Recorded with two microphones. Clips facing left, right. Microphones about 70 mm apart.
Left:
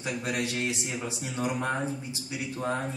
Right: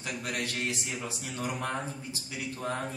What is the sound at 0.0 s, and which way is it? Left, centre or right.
Speech, left.